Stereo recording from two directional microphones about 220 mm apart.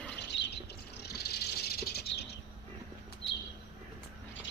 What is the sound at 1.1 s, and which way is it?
Bird, 45° left (ahead or behind).